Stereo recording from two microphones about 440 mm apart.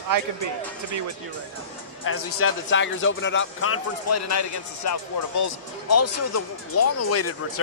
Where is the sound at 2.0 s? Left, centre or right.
Left.